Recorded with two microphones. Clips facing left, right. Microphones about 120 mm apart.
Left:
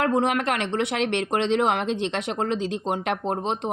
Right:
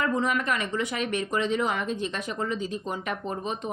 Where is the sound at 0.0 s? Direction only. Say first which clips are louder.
Left 4 dB; 70° left (ahead or behind).